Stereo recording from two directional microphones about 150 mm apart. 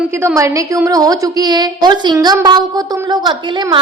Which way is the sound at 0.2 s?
20° right (ahead or behind).